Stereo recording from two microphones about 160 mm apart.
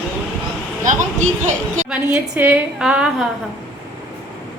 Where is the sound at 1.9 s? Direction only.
5° right (ahead or behind).